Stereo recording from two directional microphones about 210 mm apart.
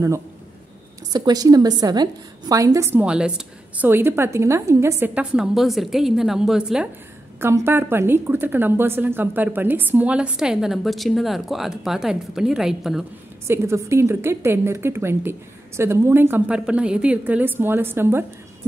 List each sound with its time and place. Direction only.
1.1 s a woman's voice: 20° right (ahead or behind); by 13.0 s centre (ahead or behind)
13.5 s a woman's voice: 15° right (ahead or behind)